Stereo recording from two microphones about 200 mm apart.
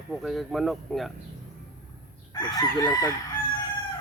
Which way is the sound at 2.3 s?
20° left (ahead or behind).